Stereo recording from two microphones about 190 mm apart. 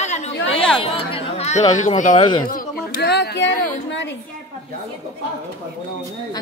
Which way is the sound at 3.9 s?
70° left (ahead or behind).